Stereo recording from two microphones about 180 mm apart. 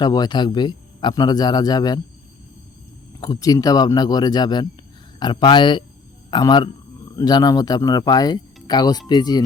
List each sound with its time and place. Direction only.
0.0 s speech: 20° left (ahead or behind)
3.2 s speech: 20° left (ahead or behind)